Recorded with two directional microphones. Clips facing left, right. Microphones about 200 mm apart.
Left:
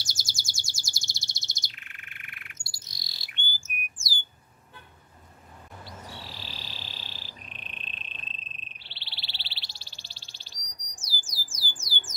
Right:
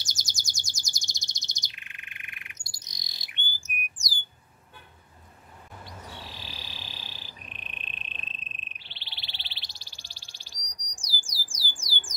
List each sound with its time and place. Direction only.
0.0 s chirp: 15° right (ahead or behind)
6.1 s frog: 15° right (ahead or behind)
11.2 s a sound: 10° right (ahead or behind)